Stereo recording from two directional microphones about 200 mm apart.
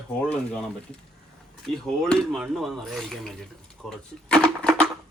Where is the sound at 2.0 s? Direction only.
Centre (ahead or behind).